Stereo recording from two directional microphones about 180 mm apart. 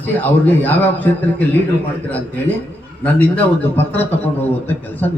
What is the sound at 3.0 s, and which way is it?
A man's voice, 10° left (ahead or behind).